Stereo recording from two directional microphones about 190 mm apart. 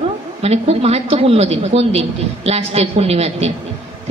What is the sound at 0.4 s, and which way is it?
A woman's voice, 35° right (ahead or behind).